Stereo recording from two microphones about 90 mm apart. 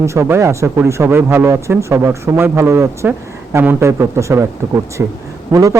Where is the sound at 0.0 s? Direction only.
30° right (ahead or behind).